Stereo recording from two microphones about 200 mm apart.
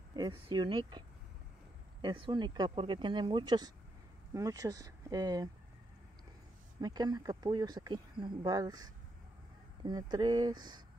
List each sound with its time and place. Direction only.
0.5 s speech: 20° right (ahead or behind)
6.8 s speech: 20° right (ahead or behind)